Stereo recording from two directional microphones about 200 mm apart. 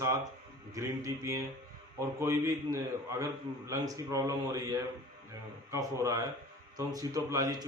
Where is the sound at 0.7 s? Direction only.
15° right (ahead or behind).